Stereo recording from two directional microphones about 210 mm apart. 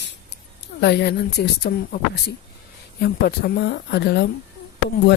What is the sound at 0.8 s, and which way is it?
Speech, 50° left (ahead or behind).